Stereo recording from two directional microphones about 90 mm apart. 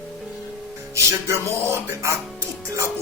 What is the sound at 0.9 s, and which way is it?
Music, 30° right (ahead or behind).